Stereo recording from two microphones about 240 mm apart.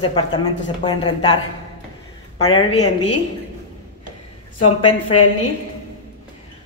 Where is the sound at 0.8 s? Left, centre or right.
Centre.